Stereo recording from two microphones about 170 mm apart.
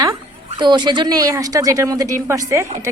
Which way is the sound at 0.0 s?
25° right (ahead or behind).